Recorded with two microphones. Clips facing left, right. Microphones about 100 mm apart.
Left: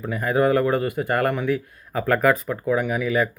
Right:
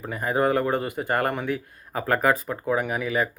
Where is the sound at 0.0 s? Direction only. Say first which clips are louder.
Left 3 dB; 25° right (ahead or behind).